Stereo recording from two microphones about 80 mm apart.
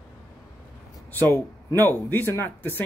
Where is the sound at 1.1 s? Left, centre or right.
Left.